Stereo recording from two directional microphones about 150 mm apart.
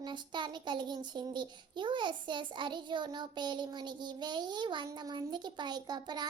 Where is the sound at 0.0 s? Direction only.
30° right (ahead or behind).